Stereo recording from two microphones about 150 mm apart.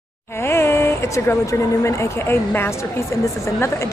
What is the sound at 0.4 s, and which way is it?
Speech, 15° left (ahead or behind).